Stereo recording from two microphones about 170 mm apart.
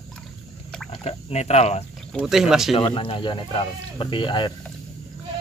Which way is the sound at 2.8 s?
35° left (ahead or behind).